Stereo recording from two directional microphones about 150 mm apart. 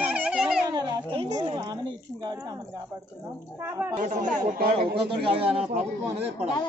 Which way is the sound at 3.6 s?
15° right (ahead or behind).